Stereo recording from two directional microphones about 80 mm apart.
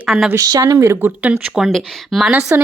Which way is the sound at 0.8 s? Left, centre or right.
Right.